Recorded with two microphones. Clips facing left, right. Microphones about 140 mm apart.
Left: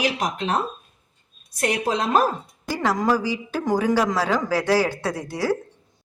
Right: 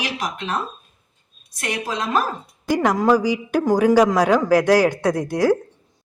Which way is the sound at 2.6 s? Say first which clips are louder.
Right 5 dB; 15° right (ahead or behind).